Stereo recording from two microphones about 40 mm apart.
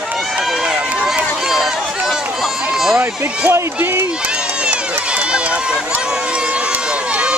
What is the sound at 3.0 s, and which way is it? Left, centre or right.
Speech, right.